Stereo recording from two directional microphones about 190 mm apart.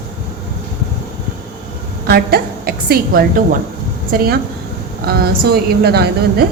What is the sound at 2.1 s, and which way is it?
A woman's voice, 55° right (ahead or behind).